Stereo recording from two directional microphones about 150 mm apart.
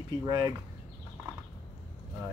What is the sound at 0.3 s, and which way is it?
Speech, 25° right (ahead or behind).